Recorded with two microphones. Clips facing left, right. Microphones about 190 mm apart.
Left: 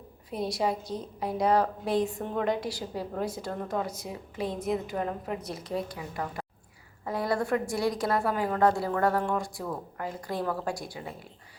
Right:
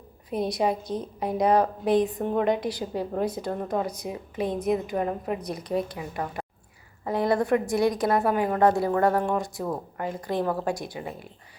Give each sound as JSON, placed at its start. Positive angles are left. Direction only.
{"t": 0.3, "sound": "a woman's voice", "side_deg": -20}